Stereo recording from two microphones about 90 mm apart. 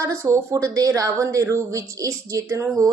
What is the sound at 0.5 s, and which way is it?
A woman's voice, 40° right (ahead or behind).